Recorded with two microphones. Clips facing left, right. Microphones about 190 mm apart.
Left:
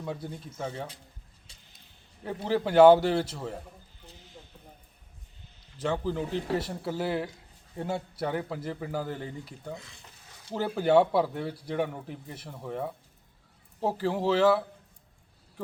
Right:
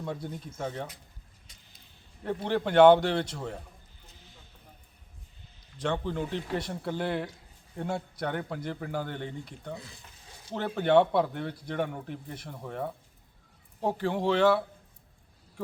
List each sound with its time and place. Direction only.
0.0 s a man's voice: centre (ahead or behind)
1.5 s creak: 30° left (ahead or behind)
2.2 s a man's voice: 5° left (ahead or behind)
5.7 s a man's voice: 5° left (ahead or behind)